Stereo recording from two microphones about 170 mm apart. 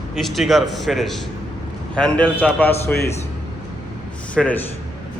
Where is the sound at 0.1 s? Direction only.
Centre (ahead or behind).